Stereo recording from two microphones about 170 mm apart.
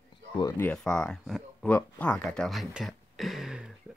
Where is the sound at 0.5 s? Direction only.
10° left (ahead or behind).